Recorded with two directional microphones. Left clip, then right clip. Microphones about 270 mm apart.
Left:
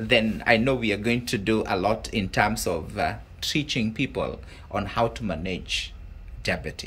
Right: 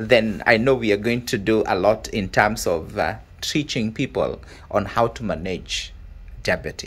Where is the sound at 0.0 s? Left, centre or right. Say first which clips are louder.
Right 5 dB; centre.